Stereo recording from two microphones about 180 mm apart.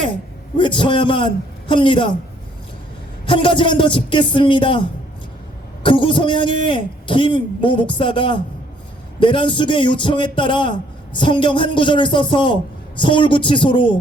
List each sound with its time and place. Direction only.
0.5 s a man's voice: 25° left (ahead or behind)
3.2 s a man's voice: 25° left (ahead or behind)